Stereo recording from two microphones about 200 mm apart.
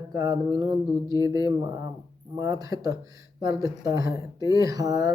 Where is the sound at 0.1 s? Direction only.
20° right (ahead or behind).